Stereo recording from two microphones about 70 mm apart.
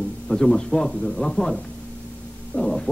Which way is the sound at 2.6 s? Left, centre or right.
Centre.